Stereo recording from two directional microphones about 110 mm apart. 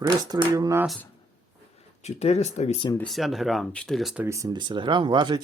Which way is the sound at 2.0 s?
80° left.